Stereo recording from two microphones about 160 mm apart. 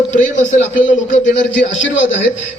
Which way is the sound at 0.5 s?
55° left (ahead or behind).